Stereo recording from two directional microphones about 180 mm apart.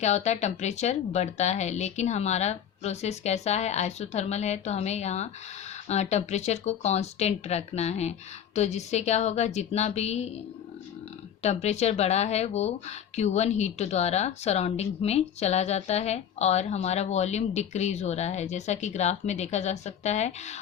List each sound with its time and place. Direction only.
0.0 s speech: 40° left (ahead or behind)
11.4 s speech: 35° left (ahead or behind)